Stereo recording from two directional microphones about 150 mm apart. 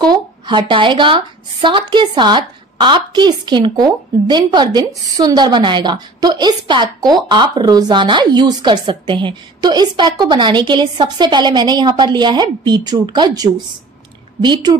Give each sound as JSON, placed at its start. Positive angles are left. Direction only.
{"t": 0.0, "sound": "a woman's voice", "side_deg": -30}